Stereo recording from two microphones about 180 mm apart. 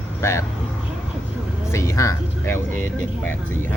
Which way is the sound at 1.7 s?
15° left (ahead or behind).